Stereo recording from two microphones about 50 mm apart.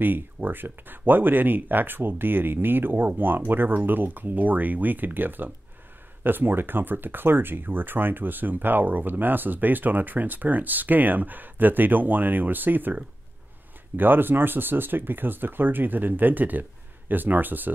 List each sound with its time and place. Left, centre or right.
0.0 s speech: right